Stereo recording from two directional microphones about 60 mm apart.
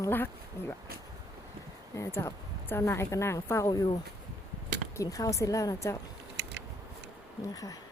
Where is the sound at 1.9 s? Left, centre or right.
Left.